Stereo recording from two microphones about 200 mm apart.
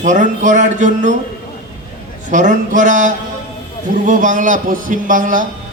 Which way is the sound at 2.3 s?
40° right (ahead or behind).